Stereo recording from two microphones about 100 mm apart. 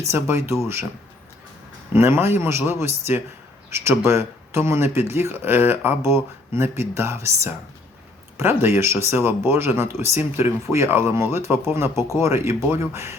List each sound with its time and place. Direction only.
0.1 s speech: 25° right (ahead or behind)
1.9 s speech: 25° right (ahead or behind)